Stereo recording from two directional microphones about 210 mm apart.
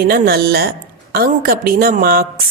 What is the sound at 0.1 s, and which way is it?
Speech, 50° right (ahead or behind).